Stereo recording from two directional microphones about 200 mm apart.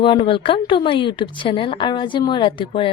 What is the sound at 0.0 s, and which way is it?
Speech, 25° left (ahead or behind).